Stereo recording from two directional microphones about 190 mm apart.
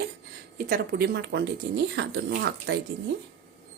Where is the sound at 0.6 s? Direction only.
50° right (ahead or behind).